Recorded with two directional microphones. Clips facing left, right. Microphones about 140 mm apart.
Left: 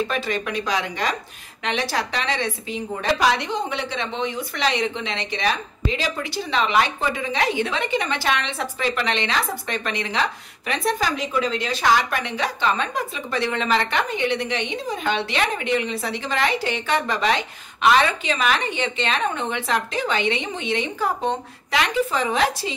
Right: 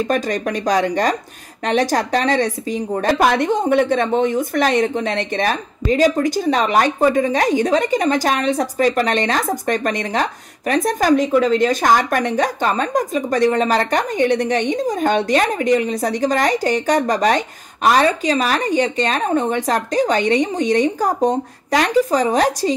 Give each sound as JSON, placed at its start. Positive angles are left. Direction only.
{"t": 0.0, "sound": "a woman's voice", "side_deg": -45}